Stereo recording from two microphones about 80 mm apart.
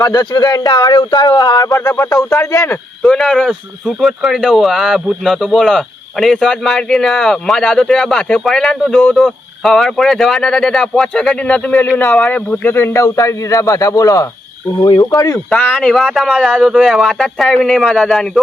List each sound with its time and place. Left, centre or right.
0.0 s a man's voice: left
3.0 s speech: centre
12.7 s a man's voice: left
15.8 s speech: centre